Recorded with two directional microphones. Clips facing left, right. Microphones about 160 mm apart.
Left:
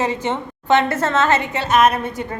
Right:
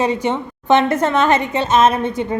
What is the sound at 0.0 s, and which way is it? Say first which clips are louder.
A woman's voice: right 3 dB; 15° right (ahead or behind).